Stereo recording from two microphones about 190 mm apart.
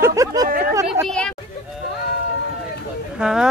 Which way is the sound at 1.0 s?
5° left (ahead or behind).